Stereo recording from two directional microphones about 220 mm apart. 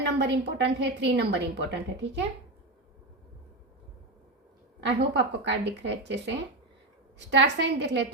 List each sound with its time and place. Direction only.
0.0 s a woman's voice: 55° right (ahead or behind)
4.8 s speech: 55° right (ahead or behind)